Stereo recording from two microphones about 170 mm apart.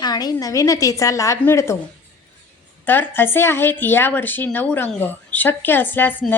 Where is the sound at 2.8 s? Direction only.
10° left (ahead or behind).